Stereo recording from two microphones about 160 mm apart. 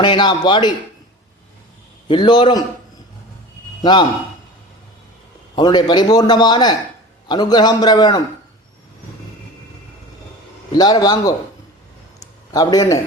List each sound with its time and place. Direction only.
0.0 s a man's voice: 30° left (ahead or behind)
2.0 s a man's voice: 30° left (ahead or behind)
5.5 s a man's voice: 25° left (ahead or behind)
10.7 s a man's voice: 25° left (ahead or behind)
12.2 s a sound: 25° left (ahead or behind)